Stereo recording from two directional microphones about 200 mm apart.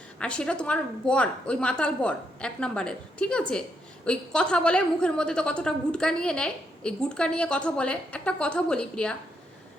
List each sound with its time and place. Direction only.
0.2 s a woman's voice: 5° left (ahead or behind)